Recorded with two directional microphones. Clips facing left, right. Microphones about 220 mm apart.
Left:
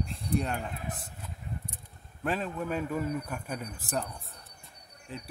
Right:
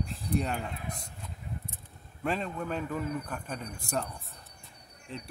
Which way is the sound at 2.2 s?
Centre (ahead or behind).